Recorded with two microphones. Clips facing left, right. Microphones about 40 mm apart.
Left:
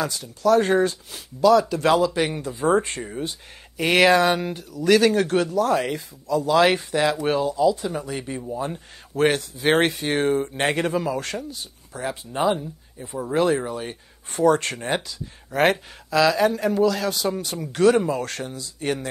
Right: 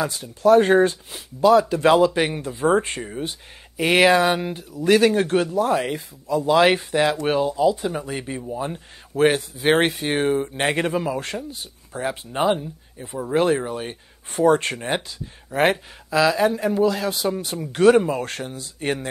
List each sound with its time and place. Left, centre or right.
0.1 s speech: right
3.8 s speech: centre
5.8 s speech: centre
6.2 s speech: right
9.2 s speech: centre
17.7 s speech: right